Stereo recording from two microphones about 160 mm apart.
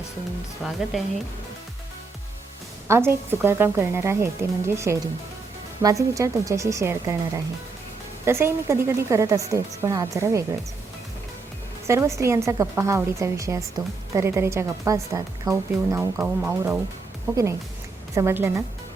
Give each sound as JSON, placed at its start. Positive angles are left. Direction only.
{"t": 0.6, "sound": "a woman's voice", "side_deg": 0}
{"t": 2.8, "sound": "a woman's voice", "side_deg": -15}
{"t": 11.9, "sound": "a woman's voice", "side_deg": -20}
{"t": 18.1, "sound": "a woman's voice", "side_deg": -15}